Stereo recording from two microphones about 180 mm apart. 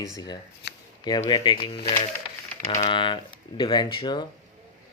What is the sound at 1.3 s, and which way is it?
Speech, 25° left (ahead or behind).